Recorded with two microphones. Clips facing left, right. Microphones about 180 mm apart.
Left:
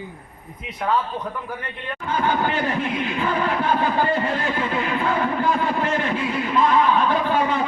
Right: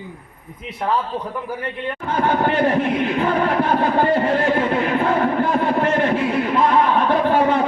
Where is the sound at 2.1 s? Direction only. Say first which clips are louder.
Right 3 dB; 60° right (ahead or behind).